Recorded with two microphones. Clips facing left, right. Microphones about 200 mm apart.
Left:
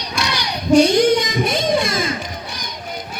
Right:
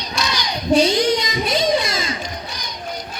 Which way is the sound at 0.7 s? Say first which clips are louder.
Left 4 dB; 50° left (ahead or behind).